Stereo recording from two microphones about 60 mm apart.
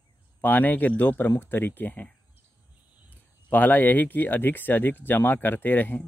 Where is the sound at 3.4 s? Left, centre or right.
Left.